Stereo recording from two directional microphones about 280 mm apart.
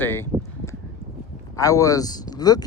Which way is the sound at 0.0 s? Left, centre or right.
Centre.